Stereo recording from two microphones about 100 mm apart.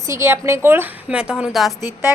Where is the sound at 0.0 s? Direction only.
30° right (ahead or behind).